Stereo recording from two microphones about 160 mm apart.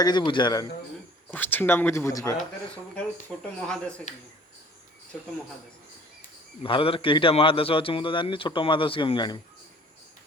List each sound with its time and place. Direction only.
0.0 s a man's voice: 25° left (ahead or behind)
1.3 s speech: 10° left (ahead or behind)
3.3 s speech: centre (ahead or behind)
6.6 s a man's voice: 35° left (ahead or behind)